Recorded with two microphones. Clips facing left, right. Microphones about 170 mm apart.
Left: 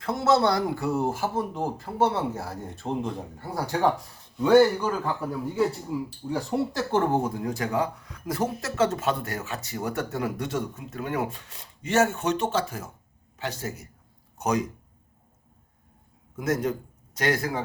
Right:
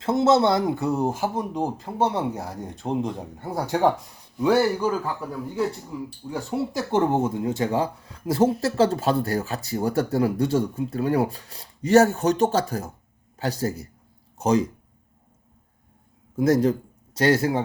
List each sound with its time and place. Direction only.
0.0 s speech: 25° right (ahead or behind)
4.4 s a man's voice: 5° right (ahead or behind)
5.9 s speech: 10° left (ahead or behind)
6.3 s speech: 5° right (ahead or behind)
6.9 s speech: 20° right (ahead or behind)
16.3 s a man's voice: 30° right (ahead or behind)